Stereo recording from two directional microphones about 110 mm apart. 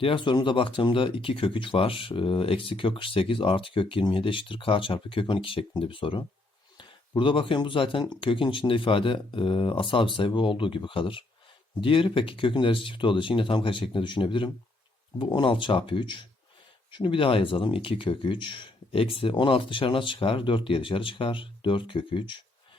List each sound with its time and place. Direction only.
0.0 s speech: 50° left (ahead or behind)